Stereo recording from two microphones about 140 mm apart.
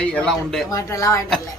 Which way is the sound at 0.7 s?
25° left (ahead or behind).